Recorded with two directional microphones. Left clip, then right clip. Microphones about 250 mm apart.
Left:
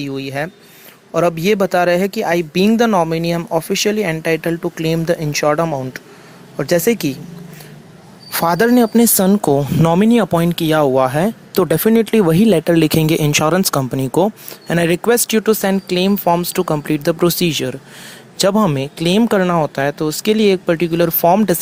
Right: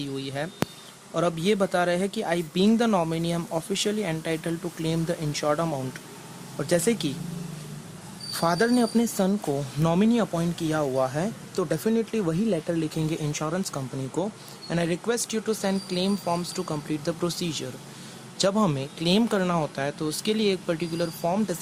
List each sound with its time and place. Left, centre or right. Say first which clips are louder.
0.3 s speech: left 7 dB; left
8.3 s speech: left 10 dB; left